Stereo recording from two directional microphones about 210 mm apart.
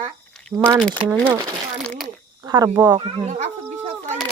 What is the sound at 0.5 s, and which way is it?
Speech, 10° right (ahead or behind).